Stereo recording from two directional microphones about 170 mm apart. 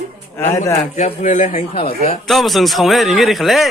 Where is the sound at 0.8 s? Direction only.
45° left (ahead or behind).